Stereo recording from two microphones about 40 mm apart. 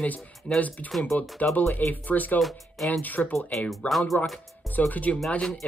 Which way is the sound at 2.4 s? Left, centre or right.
Centre.